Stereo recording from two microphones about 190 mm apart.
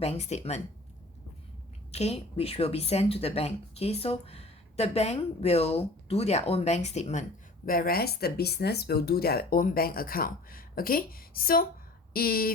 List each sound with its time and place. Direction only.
0.0 s a woman's voice: 35° left (ahead or behind)
1.9 s a woman's voice: 35° left (ahead or behind); by 12.5 s 50° left (ahead or behind)